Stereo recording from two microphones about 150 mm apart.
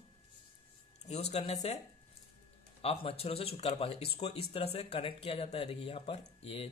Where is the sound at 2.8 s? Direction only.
40° left (ahead or behind).